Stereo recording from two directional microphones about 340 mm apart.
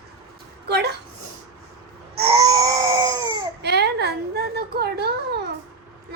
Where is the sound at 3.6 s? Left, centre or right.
Right.